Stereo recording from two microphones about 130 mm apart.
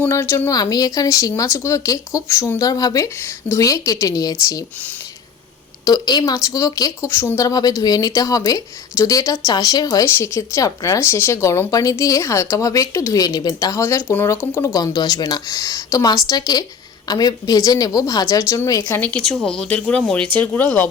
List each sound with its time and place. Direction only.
0.0 s a woman's voice: 20° left (ahead or behind)
0.5 s a woman's voice: 30° left (ahead or behind)
5.8 s a woman's voice: 30° left (ahead or behind); by 20.8 s 15° left (ahead or behind)